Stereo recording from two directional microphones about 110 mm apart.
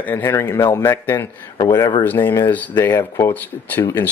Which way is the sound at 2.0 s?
20° left (ahead or behind).